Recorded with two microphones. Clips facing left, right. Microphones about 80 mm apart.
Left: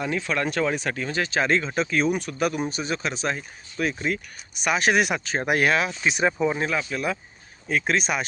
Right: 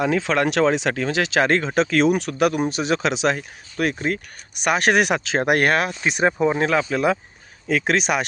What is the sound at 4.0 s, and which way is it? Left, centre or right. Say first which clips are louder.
Speech: right 3 dB; right.